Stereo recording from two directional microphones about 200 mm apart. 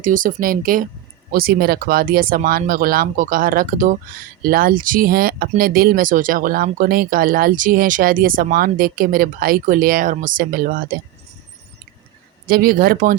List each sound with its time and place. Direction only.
0.0 s speech: 40° right (ahead or behind)
12.5 s speech: 45° right (ahead or behind)